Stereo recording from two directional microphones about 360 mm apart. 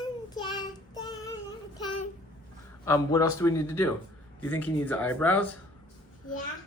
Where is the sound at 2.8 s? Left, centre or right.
Centre.